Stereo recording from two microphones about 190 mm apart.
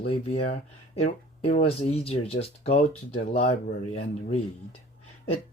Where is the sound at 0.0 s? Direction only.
30° left (ahead or behind).